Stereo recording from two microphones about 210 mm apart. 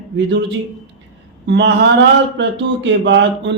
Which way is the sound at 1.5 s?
55° right (ahead or behind).